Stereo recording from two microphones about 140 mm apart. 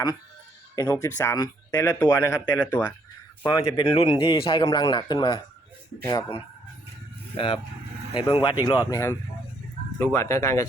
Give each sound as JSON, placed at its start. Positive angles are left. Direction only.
{"t": 0.8, "sound": "speech", "side_deg": 20}
{"t": 3.4, "sound": "speech", "side_deg": 30}
{"t": 7.3, "sound": "speech", "side_deg": 35}
{"t": 8.8, "sound": "speech", "side_deg": 20}